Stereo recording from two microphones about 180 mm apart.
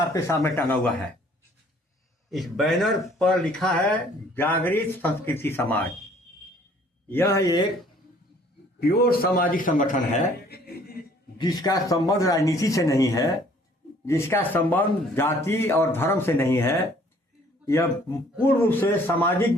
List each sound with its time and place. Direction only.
0.1 s speech: 15° left (ahead or behind)
2.3 s a man's voice: centre (ahead or behind)
7.1 s speech: 15° left (ahead or behind)
8.8 s a man's voice: 60° left (ahead or behind); by 10.3 s 40° left (ahead or behind)
10.5 s a sound: 60° left (ahead or behind)
11.3 s speech: 20° left (ahead or behind)